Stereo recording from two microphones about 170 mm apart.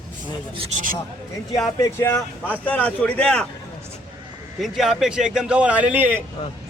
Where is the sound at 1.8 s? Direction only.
20° left (ahead or behind).